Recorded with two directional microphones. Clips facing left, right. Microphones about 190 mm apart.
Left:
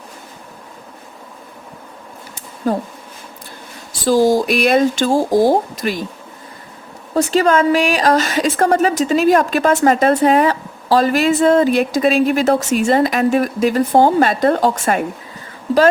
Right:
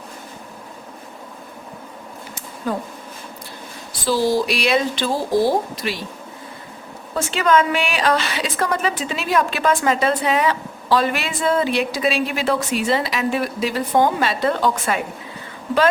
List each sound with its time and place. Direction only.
2.6 s a woman's voice: 40° left (ahead or behind)
4.0 s a woman's voice: 45° left (ahead or behind)
7.1 s a woman's voice: 40° left (ahead or behind)